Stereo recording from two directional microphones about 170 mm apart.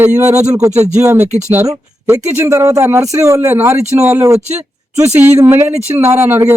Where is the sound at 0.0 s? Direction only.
15° right (ahead or behind).